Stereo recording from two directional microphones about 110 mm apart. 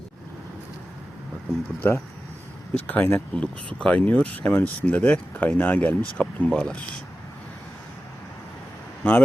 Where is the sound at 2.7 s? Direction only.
15° left (ahead or behind).